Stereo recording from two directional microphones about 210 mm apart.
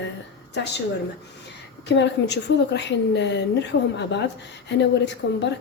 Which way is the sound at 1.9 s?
55° left (ahead or behind).